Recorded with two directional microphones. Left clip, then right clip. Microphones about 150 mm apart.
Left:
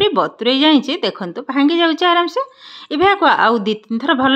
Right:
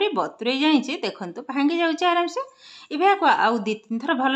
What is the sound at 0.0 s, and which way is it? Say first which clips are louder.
A woman's voice: left 8 dB; 30° left (ahead or behind).